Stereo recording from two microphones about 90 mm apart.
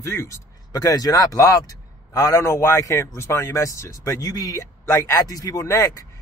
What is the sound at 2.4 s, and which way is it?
Speech, 30° left (ahead or behind).